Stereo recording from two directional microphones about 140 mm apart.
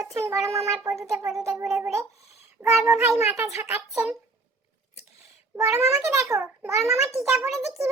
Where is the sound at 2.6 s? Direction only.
25° right (ahead or behind).